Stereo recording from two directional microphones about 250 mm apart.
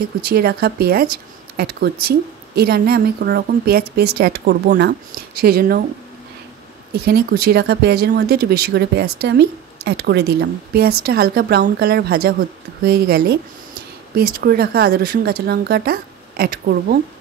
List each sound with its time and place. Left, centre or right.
0.2 s speech: right
7.1 s speech: right